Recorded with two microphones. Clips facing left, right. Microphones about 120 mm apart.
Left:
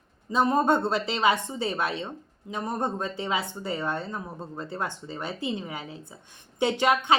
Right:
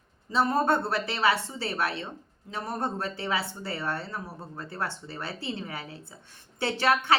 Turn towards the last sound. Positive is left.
turn(degrees=15)  # may be behind; listen again after turning